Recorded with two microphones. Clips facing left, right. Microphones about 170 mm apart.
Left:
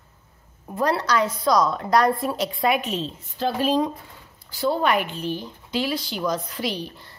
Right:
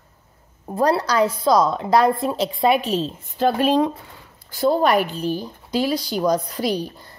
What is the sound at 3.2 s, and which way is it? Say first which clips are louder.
Speech: right 5 dB; 55° right (ahead or behind).